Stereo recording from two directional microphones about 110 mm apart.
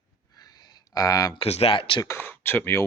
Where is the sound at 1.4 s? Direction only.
60° left (ahead or behind).